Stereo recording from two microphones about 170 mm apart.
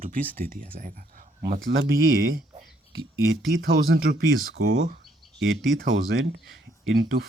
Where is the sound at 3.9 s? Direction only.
90° right.